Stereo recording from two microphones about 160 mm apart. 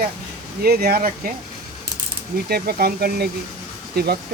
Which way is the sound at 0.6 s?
80° right.